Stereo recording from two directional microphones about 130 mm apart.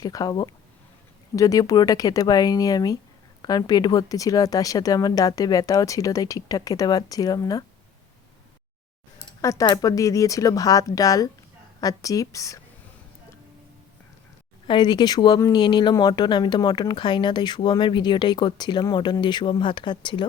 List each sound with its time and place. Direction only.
0.0 s speech: 30° left (ahead or behind)
9.4 s speech: 25° left (ahead or behind)
14.7 s speech: 35° left (ahead or behind)